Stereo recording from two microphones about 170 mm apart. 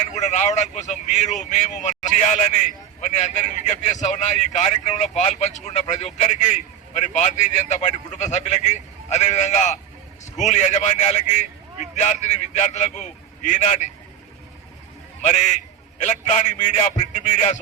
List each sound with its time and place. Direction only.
0.1 s a man's voice: 45° left (ahead or behind)
16.0 s a man's voice: 45° left (ahead or behind)